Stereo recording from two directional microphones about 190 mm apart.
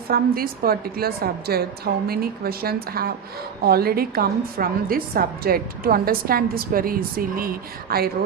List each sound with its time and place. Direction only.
0.1 s a woman's voice: 50° right (ahead or behind)